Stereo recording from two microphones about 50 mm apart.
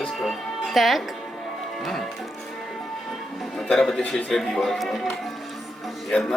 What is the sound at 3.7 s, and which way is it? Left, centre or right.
Speech, centre.